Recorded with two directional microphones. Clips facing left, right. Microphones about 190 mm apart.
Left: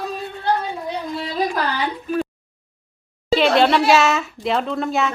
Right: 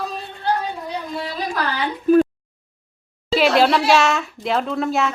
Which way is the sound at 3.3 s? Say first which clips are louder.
Left 1 dB; centre (ahead or behind).